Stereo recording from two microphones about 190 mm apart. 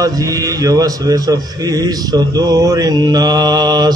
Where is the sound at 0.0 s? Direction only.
20° right (ahead or behind).